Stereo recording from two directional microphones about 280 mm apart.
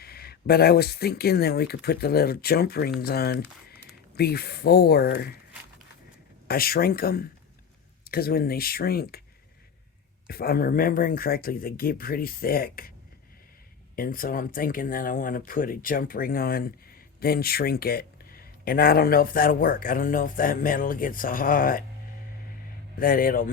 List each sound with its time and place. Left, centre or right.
0.0 s speech: left
6.5 s speech: left
10.2 s speech: left
13.9 s speech: left
23.0 s speech: left